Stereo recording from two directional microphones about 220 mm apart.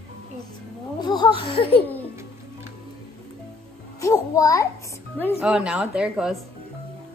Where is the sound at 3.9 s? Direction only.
15° left (ahead or behind).